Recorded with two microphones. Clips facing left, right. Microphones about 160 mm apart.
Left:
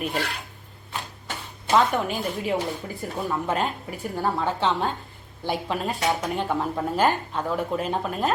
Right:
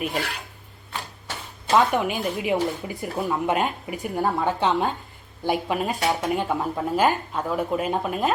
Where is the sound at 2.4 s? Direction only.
15° right (ahead or behind).